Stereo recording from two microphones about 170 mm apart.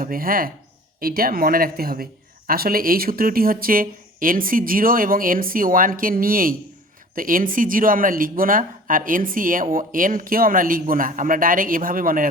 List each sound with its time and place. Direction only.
0.0 s speech: 60° right (ahead or behind)